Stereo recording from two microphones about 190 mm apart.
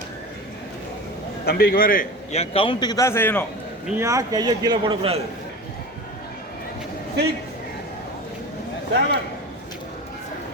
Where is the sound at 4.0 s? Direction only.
15° right (ahead or behind).